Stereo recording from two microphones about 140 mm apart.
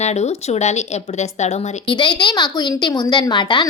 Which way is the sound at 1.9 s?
35° left (ahead or behind).